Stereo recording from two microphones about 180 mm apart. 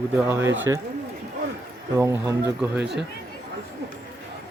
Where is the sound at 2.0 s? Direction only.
15° right (ahead or behind).